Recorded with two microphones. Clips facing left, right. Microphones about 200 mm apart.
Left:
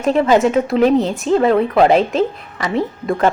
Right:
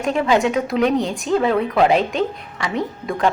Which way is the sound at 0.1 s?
35° left (ahead or behind).